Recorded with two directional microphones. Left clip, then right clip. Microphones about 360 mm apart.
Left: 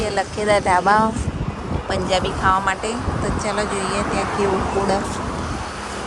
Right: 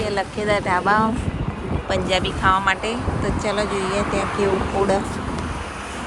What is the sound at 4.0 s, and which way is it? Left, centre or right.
Speech, left.